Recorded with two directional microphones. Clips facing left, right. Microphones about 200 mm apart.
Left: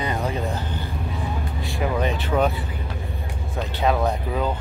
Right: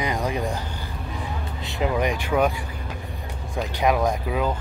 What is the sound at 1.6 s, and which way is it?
Vehicle, 20° right (ahead or behind).